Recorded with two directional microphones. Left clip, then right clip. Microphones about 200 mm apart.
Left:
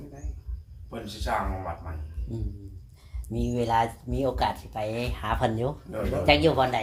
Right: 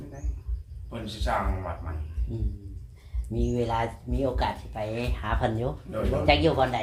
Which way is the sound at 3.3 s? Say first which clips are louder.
Left 2 dB; 45° left (ahead or behind).